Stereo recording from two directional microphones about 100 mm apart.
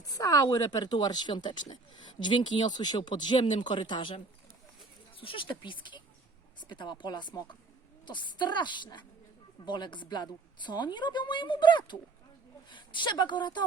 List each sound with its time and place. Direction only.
0.0 s a woman's voice: 35° left (ahead or behind); by 4.1 s 55° left (ahead or behind)
5.1 s a woman's voice: 60° left (ahead or behind)